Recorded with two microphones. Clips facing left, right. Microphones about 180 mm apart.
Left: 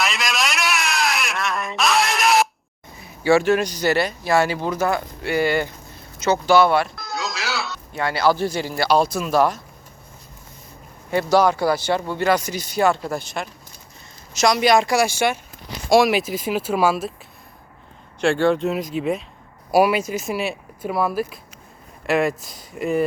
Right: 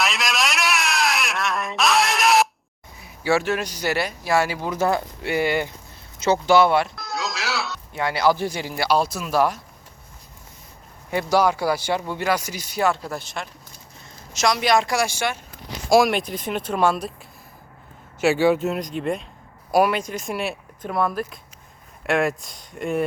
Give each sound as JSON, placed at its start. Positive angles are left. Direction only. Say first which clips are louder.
{"t": 0.0, "sound": "a sound", "louder": "even", "side_deg": 0}
{"t": 3.2, "sound": "speech", "louder": "left 5 dB", "side_deg": -5}
{"t": 4.7, "sound": "speech", "louder": "even", "side_deg": -30}
{"t": 6.9, "sound": "music", "louder": "even", "side_deg": 0}
{"t": 7.9, "sound": "speech", "louder": "left 1 dB", "side_deg": -15}
{"t": 11.1, "sound": "speech", "louder": "left 3 dB", "side_deg": -15}
{"t": 18.2, "sound": "speech", "louder": "even", "side_deg": -5}